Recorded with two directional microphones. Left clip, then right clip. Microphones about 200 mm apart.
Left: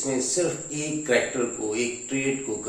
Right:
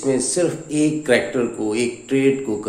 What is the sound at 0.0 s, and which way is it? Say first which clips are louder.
Speech: right 6 dB; 50° right (ahead or behind).